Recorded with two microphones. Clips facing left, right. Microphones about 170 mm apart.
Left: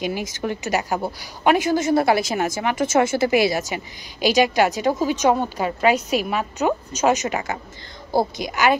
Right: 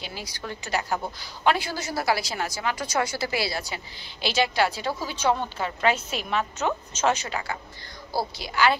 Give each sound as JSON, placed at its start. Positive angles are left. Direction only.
{"t": 0.0, "sound": "a woman's voice", "side_deg": 20}